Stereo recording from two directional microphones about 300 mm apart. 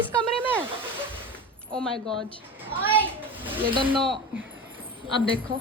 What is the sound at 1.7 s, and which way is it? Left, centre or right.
Speech, centre.